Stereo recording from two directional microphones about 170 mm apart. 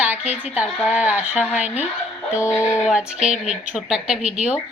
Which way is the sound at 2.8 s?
5° right (ahead or behind).